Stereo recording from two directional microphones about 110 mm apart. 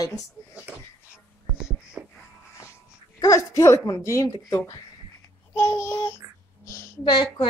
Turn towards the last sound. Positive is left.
turn(degrees=40)  # may be behind; listen again after turning